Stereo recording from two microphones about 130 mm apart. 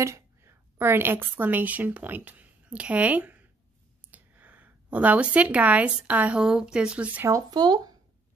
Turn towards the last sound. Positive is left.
turn(degrees=-30)  # may be behind; listen again after turning